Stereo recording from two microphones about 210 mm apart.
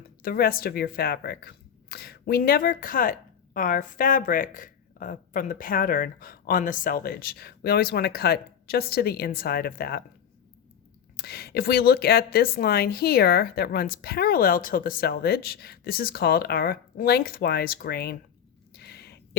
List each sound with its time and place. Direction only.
0.2 s speech: 45° left (ahead or behind)
11.2 s speech: 50° left (ahead or behind)
18.7 s a sound: 50° left (ahead or behind)